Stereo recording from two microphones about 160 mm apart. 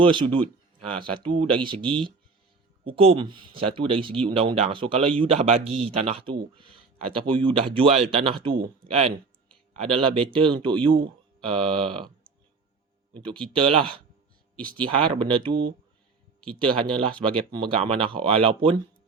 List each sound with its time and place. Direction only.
0.0 s speech: 30° right (ahead or behind)
13.5 s speech: 35° right (ahead or behind)
17.0 s speech: 35° right (ahead or behind)